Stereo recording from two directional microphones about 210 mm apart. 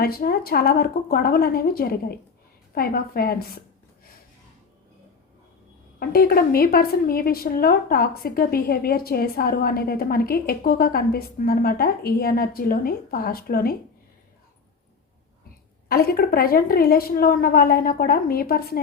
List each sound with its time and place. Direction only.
0.0 s a woman's voice: 45° left (ahead or behind)
6.0 s a woman's voice: 45° left (ahead or behind)
15.9 s a woman's voice: 45° left (ahead or behind)